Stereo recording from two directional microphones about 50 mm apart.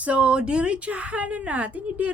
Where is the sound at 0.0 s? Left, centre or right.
Right.